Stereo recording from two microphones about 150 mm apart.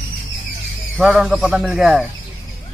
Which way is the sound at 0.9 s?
5° right (ahead or behind).